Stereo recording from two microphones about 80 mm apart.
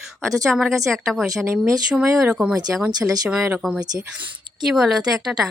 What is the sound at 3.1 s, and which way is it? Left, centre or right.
Speech, right.